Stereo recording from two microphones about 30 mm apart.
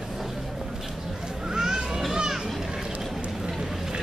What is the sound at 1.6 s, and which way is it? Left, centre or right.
Children playing, centre.